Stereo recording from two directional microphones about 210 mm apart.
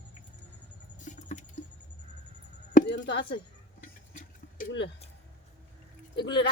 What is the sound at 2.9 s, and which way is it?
Speech, 55° left (ahead or behind).